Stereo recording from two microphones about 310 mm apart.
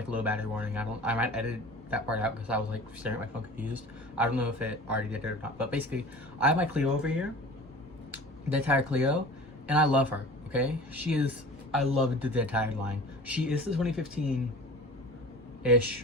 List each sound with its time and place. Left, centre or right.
0.1 s speech: centre
15.6 s speech: centre